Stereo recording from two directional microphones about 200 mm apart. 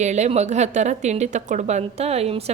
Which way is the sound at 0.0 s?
35° right (ahead or behind).